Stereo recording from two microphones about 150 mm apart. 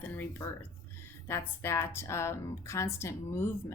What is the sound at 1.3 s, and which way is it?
A woman's voice, 15° left (ahead or behind).